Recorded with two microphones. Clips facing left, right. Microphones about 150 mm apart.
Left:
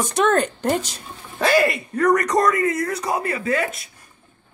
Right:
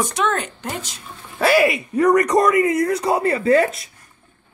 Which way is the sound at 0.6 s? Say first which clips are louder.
Left 8 dB; 35° left (ahead or behind).